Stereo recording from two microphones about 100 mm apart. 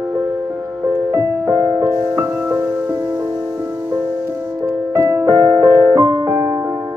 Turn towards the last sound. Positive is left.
turn(degrees=-35)  # may be behind; listen again after turning